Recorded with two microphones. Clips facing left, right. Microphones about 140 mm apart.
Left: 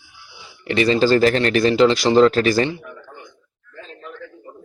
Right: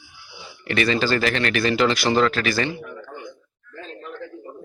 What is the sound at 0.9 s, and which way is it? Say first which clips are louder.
Speech: left 8 dB; 35° left (ahead or behind).